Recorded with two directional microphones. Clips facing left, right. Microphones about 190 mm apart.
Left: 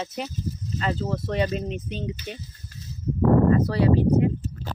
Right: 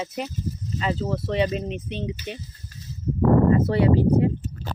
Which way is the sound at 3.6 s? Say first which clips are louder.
Right 1 dB; 25° right (ahead or behind).